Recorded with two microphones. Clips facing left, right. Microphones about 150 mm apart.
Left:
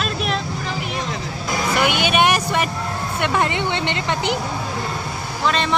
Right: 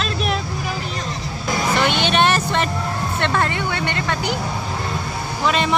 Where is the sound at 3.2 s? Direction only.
15° left (ahead or behind).